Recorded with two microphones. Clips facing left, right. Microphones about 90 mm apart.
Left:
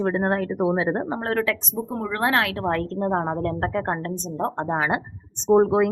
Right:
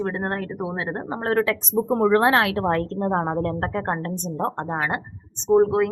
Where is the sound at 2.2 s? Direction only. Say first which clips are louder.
Right 3 dB; 25° right (ahead or behind).